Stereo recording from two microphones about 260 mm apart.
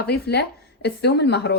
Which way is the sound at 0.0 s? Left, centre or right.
Left.